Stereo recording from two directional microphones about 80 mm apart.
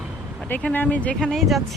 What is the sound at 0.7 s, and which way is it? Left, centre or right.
Speech, left.